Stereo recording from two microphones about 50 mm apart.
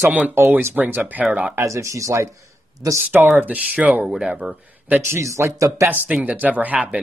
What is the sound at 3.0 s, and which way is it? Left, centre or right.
Speech, right.